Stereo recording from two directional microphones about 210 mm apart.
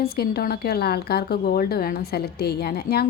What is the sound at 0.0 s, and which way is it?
A woman's voice, 45° left (ahead or behind).